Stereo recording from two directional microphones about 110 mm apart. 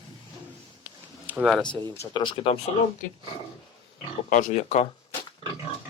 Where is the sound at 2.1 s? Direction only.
50° left (ahead or behind).